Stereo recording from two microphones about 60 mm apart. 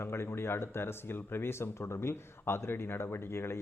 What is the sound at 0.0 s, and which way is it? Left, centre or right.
Speech, left.